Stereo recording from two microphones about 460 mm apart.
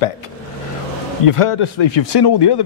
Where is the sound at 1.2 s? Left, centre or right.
Left.